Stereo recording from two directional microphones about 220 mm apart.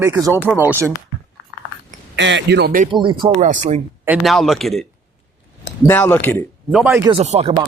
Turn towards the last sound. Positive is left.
turn(degrees=-30)  # may be behind; listen again after turning